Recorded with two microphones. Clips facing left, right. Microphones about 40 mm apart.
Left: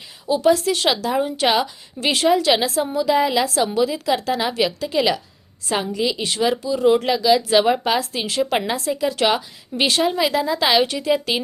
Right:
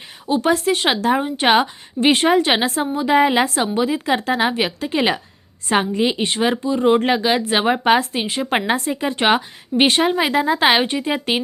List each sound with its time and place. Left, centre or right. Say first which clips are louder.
0.3 s a woman's voice: even; right
8.6 s a woman's voice: right 1 dB; right